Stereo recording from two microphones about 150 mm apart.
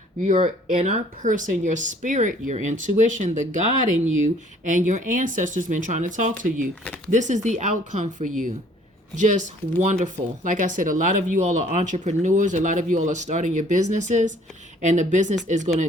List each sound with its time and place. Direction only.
0.2 s speech: 55° right (ahead or behind)